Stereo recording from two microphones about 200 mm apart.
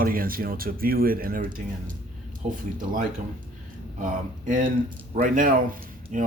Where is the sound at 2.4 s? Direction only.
35° right (ahead or behind).